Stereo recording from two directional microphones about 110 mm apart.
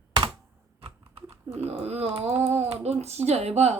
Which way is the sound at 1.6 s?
70° right (ahead or behind).